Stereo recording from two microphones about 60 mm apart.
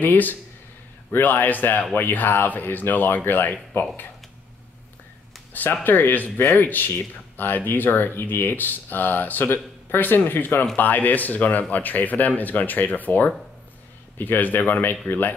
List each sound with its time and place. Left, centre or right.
0.0 s speech: left
5.5 s speech: left